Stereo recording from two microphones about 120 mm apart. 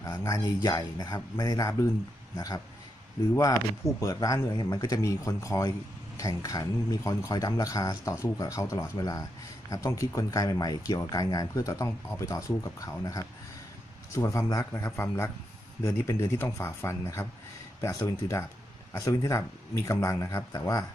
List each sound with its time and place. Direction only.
0.0 s speech: 25° left (ahead or behind)